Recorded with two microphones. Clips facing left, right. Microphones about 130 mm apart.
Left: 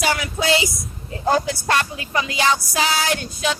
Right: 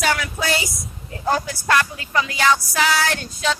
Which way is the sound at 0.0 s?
10° left (ahead or behind).